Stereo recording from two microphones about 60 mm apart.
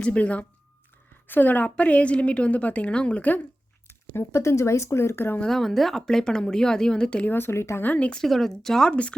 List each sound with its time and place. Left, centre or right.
0.0 s a woman's voice: left
3.8 s speech: left
5.5 s a woman's voice: centre
7.3 s speech: left
7.9 s a woman's voice: left
8.2 s a woman's voice: centre
8.9 s a woman's voice: centre